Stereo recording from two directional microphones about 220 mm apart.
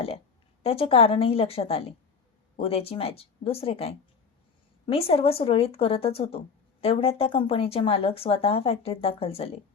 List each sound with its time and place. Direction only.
0.6 s speech: 25° left (ahead or behind)